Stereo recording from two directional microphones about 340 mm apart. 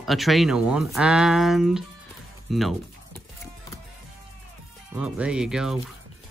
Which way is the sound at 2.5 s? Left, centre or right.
Centre.